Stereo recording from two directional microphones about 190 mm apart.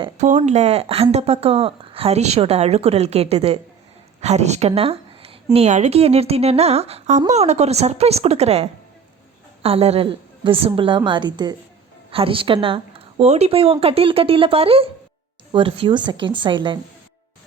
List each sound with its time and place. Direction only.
0.2 s a woman's voice: 40° right (ahead or behind)